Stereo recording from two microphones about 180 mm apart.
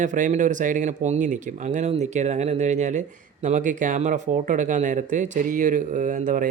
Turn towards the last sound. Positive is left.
turn(degrees=-45)  # may be behind; listen again after turning